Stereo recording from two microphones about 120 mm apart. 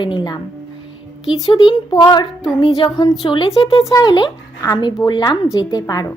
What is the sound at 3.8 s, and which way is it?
A woman's voice, 30° left (ahead or behind).